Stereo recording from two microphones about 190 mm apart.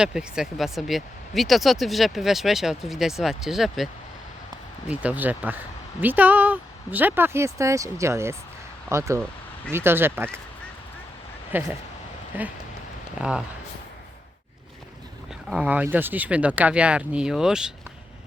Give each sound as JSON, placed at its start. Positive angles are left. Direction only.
{"t": 0.0, "sound": "speech", "side_deg": -5}
{"t": 4.9, "sound": "speech", "side_deg": -10}
{"t": 11.5, "sound": "speech", "side_deg": -10}
{"t": 15.4, "sound": "speech", "side_deg": -5}